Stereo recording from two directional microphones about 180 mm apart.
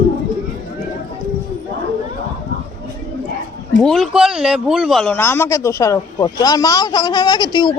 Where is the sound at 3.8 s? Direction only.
Centre (ahead or behind).